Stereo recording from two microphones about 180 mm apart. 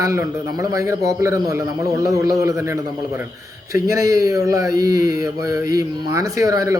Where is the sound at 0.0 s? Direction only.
15° right (ahead or behind).